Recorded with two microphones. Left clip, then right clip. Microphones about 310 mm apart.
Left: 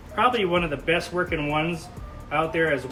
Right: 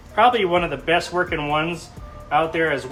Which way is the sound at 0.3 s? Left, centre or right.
Centre.